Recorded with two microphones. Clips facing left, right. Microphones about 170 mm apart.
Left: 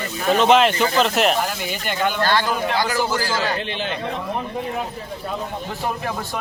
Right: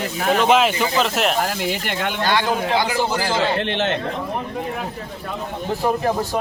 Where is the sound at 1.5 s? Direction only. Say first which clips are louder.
Right 3 dB; 75° right (ahead or behind).